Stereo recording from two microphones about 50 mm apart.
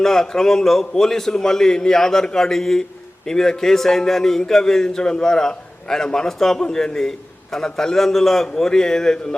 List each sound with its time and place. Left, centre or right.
0.0 s a man's voice: centre